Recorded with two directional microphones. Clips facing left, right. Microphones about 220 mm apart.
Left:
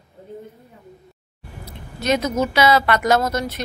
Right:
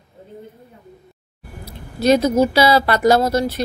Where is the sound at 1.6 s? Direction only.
35° right (ahead or behind).